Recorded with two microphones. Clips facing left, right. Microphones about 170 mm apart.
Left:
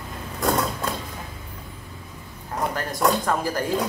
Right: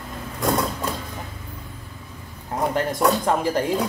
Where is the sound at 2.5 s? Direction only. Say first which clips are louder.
Right 3 dB; 25° right (ahead or behind).